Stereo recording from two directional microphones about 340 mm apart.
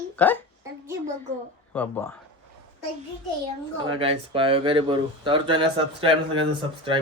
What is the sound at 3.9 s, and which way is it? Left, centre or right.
Speech, centre.